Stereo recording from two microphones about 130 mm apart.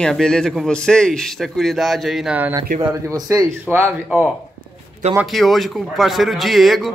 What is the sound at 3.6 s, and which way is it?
Speech, 15° right (ahead or behind).